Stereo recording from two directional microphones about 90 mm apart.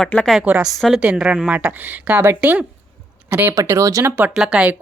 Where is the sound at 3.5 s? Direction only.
35° right (ahead or behind).